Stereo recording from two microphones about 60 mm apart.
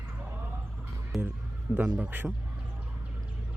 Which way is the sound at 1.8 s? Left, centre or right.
Right.